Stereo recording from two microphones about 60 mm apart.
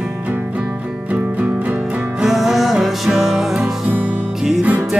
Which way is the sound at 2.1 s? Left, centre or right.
Centre.